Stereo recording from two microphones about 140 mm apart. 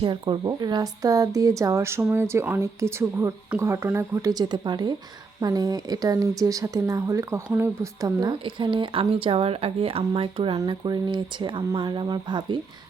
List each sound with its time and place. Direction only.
0.0 s speech: 35° right (ahead or behind); by 8.1 s 20° right (ahead or behind)
8.2 s speech: 35° right (ahead or behind)
10.6 s speech: 30° right (ahead or behind)